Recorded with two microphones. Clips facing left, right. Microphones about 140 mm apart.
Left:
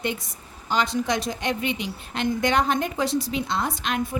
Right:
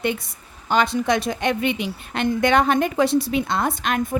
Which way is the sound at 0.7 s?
60° right (ahead or behind).